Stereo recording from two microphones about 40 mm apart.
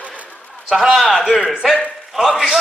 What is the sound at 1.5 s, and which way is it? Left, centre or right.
Speech, centre.